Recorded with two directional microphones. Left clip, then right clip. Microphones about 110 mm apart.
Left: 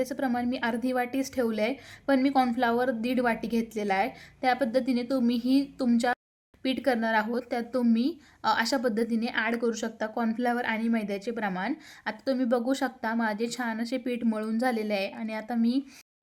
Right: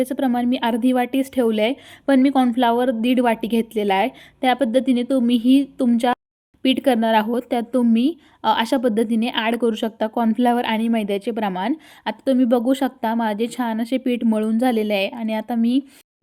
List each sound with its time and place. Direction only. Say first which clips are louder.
0.0 s a woman's voice: right 8 dB; 45° right (ahead or behind)